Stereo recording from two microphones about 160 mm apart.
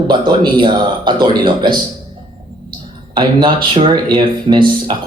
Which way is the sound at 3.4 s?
30° right (ahead or behind).